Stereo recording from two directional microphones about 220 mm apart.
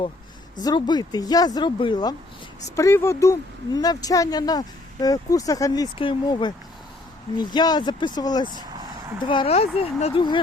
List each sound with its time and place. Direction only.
0.6 s speech: 20° left (ahead or behind)